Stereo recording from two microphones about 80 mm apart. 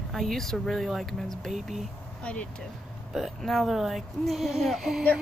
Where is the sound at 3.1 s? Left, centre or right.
Centre.